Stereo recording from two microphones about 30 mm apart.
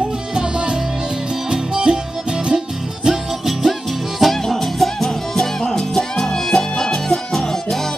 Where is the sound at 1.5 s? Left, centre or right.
Right.